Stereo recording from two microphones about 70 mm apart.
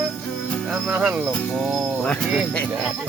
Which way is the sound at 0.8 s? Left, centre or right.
Centre.